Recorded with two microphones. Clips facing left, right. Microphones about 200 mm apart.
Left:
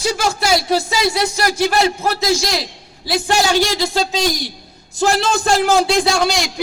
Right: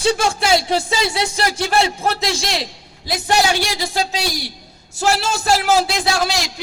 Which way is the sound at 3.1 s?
15° right (ahead or behind).